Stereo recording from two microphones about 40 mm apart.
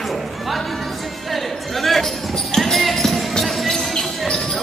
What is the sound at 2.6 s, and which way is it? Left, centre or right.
Basketball bounce, centre.